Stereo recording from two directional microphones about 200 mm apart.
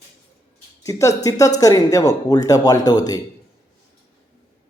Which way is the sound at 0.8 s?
15° left (ahead or behind).